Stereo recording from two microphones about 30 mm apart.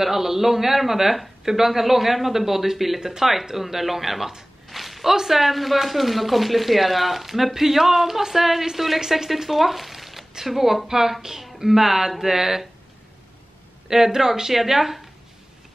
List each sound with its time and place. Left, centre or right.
0.0 s speech: centre
4.6 s a sound: centre
5.1 s speech: centre
5.4 s speech: centre
13.8 s speech: centre